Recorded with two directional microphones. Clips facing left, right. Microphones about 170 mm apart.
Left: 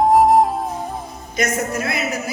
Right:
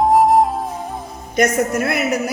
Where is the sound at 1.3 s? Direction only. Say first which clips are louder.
Right 5 dB; 55° right (ahead or behind).